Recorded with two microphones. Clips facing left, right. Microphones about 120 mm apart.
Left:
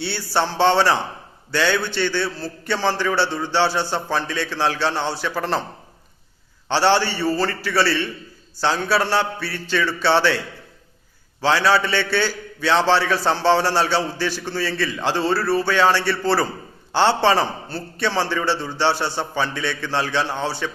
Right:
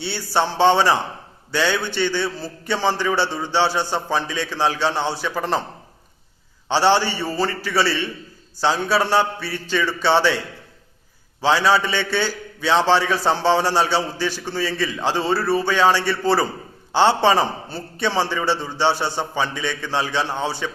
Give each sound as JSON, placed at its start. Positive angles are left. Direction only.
{"t": 0.0, "sound": "a man's voice", "side_deg": -15}
{"t": 6.7, "sound": "a man's voice", "side_deg": -15}